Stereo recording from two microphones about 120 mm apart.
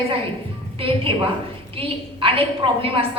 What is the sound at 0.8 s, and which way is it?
A woman's voice, 50° right (ahead or behind).